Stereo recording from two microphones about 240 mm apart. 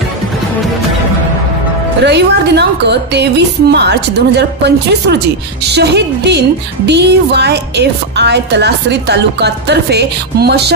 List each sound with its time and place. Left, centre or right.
2.0 s a woman's voice: right